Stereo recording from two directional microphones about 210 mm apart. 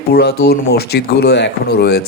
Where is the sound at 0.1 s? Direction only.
50° left (ahead or behind).